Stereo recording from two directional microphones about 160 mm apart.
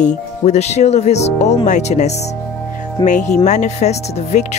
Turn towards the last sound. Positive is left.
turn(degrees=45)  # may be behind; listen again after turning